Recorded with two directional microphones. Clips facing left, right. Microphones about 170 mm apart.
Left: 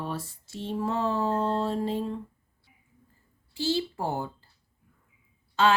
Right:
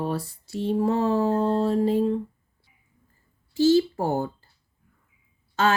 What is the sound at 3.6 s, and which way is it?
Speech, 45° right (ahead or behind).